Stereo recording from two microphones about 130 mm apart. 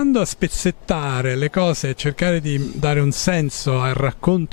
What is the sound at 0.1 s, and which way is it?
A man's voice, 10° left (ahead or behind).